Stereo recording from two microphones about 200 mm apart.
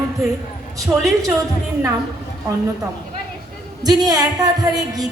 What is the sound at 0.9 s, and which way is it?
Speech, 15° right (ahead or behind).